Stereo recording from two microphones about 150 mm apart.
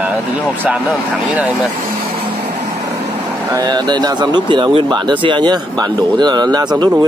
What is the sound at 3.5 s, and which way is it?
Speech, 30° right (ahead or behind).